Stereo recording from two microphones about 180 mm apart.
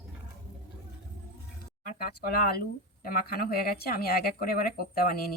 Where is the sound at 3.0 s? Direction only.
55° left (ahead or behind).